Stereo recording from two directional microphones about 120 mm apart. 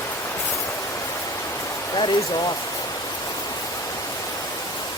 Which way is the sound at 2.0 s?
35° left (ahead or behind).